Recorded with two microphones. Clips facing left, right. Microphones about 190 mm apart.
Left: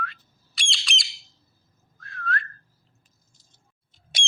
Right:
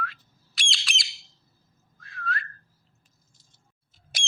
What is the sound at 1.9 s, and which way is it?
Whistling, centre (ahead or behind).